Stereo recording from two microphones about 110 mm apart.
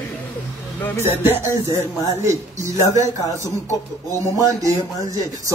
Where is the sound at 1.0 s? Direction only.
20° right (ahead or behind).